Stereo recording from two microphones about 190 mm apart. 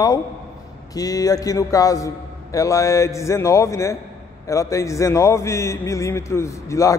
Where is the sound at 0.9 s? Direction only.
20° left (ahead or behind).